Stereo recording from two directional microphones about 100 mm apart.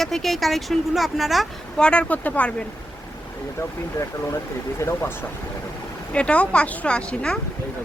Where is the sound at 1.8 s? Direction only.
10° left (ahead or behind).